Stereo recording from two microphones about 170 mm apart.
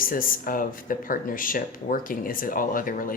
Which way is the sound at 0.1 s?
55° left (ahead or behind).